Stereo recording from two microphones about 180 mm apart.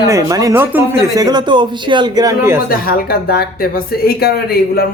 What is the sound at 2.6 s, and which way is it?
Speech, 55° left (ahead or behind).